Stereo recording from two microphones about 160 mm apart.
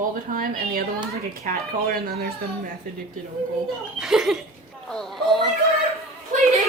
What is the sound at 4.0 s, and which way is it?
Speech, 5° right (ahead or behind).